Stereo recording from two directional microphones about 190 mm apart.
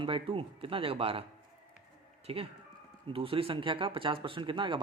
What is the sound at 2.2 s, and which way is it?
Speech, 30° right (ahead or behind).